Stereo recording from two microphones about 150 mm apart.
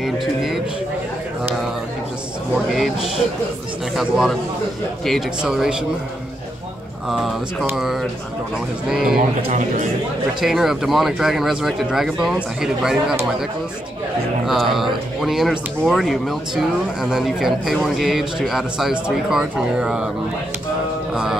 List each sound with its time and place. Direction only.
0.0 s a sound: 5° right (ahead or behind)
2.5 s speech: centre (ahead or behind)
7.1 s speech: centre (ahead or behind)
9.5 s a man's voice: 60° right (ahead or behind)
10.4 s speech: centre (ahead or behind)
14.4 s speech: centre (ahead or behind)
21.1 s music: 5° right (ahead or behind)